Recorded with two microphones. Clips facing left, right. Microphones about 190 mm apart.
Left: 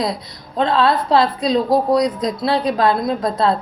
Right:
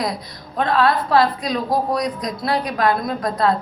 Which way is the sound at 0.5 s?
25° left (ahead or behind).